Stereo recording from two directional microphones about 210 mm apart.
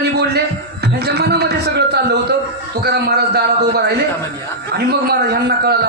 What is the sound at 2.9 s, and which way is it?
A man's voice, 50° right (ahead or behind).